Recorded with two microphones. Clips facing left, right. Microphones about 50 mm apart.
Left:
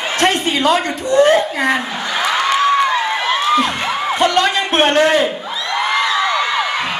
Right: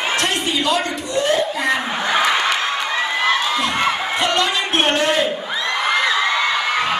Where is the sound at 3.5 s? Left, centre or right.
Left.